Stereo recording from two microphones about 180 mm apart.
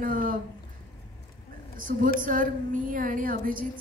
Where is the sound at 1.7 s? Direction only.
50° right (ahead or behind).